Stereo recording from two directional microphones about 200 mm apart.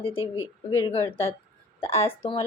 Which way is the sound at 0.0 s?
25° left (ahead or behind).